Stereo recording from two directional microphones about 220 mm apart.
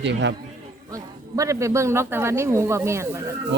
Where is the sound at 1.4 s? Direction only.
15° right (ahead or behind).